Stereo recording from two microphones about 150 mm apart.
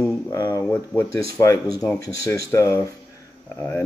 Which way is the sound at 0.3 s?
20° left (ahead or behind).